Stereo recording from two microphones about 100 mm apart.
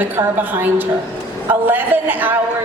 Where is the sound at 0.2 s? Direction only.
50° right (ahead or behind).